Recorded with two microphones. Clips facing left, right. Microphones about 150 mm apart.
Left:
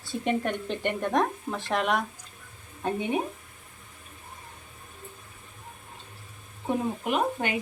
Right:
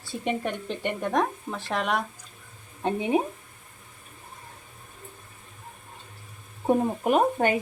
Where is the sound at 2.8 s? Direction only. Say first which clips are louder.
Right 3 dB; 30° right (ahead or behind).